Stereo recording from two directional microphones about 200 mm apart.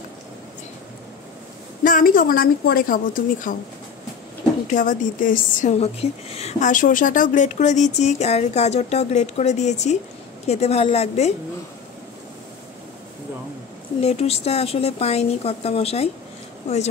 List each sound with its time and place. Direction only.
1.8 s a woman's voice: 45° left (ahead or behind)
4.6 s a woman's voice: 40° left (ahead or behind)
14.0 s a woman's voice: 30° left (ahead or behind)